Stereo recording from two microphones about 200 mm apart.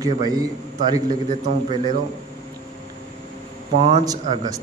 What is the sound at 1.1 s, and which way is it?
Speech, 40° right (ahead or behind).